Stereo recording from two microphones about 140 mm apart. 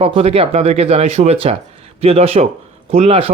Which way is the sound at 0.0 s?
45° right (ahead or behind).